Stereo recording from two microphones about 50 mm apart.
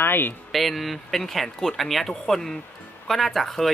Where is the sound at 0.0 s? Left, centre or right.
Left.